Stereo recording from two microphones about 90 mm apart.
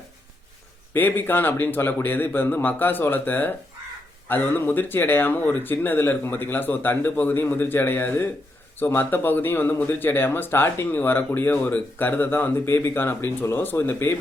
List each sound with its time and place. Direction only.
0.9 s speech: 20° left (ahead or behind)